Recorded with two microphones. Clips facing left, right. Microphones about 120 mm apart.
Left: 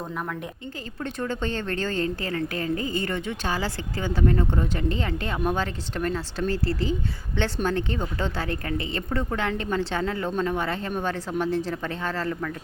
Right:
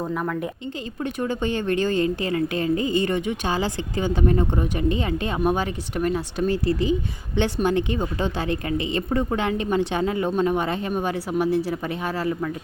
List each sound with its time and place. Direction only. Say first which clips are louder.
0.1 s speech: right 6 dB; centre (ahead or behind)
1.0 s a woman's voice: right 3 dB; 15° right (ahead or behind)